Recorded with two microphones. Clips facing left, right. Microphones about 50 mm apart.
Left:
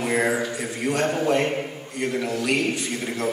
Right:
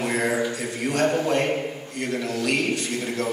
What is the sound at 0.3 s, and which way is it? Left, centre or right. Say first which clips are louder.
Mantra: even; centre.